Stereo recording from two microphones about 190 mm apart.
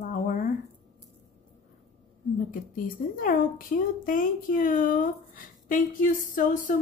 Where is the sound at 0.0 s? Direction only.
45° left (ahead or behind).